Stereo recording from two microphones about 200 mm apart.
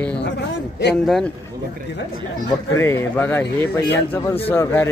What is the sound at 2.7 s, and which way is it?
Speech, 10° left (ahead or behind).